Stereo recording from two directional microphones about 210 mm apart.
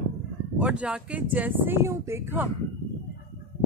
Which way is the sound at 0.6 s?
5° right (ahead or behind).